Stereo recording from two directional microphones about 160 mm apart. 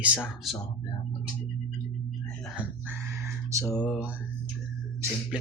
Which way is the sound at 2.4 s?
10° right (ahead or behind).